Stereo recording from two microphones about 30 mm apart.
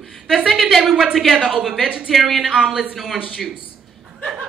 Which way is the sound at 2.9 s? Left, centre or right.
Centre.